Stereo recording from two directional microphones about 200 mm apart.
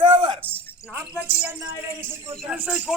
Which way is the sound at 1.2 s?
10° right (ahead or behind).